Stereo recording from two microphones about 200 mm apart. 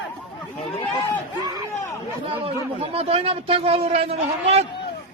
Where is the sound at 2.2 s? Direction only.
30° right (ahead or behind).